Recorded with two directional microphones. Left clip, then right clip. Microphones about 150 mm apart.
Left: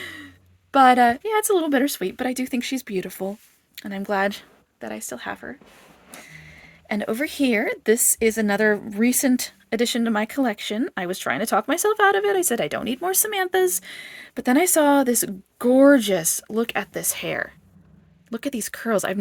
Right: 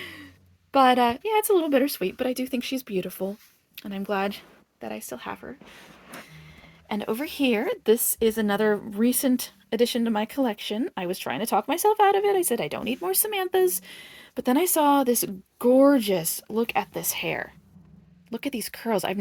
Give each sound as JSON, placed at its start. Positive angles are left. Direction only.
{"t": 0.0, "sound": "a sound", "side_deg": 45}
{"t": 0.7, "sound": "a woman's voice", "side_deg": 40}
{"t": 6.8, "sound": "a woman's voice", "side_deg": 40}